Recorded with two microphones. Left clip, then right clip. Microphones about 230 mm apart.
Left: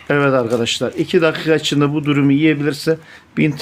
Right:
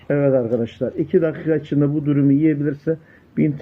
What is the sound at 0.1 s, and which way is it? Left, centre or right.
Speech, left.